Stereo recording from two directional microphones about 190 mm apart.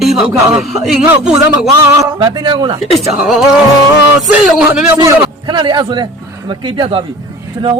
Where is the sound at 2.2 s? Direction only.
25° right (ahead or behind).